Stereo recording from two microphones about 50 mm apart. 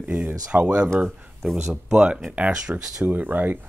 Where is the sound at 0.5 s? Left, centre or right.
Right.